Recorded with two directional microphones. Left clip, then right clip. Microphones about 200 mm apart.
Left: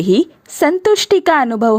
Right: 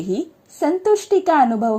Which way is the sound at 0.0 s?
35° left (ahead or behind).